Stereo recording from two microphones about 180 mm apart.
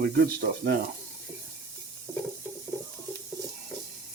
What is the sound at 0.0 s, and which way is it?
Speech, 55° right (ahead or behind).